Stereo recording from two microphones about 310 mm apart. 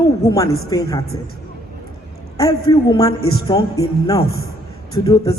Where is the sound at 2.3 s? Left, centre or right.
Centre.